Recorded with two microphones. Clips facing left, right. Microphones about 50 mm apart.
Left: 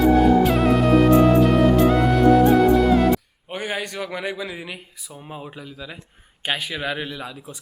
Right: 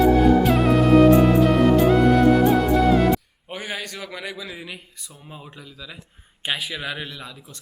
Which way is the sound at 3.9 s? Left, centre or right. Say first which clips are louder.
Left 5 dB; centre.